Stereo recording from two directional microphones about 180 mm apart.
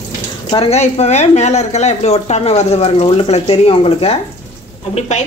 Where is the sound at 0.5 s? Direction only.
35° left (ahead or behind).